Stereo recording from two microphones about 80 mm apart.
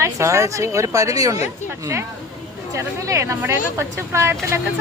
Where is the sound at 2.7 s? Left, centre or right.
Right.